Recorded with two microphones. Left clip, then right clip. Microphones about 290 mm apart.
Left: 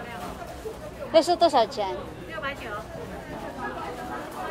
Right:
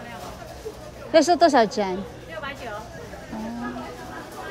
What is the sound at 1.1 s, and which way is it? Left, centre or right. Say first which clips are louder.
Speech: right 3 dB; right.